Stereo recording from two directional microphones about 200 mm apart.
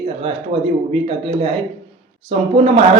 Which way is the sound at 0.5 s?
30° right (ahead or behind).